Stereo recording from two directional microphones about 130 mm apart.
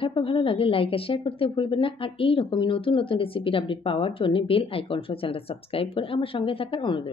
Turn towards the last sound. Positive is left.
turn(degrees=40)  # may be behind; listen again after turning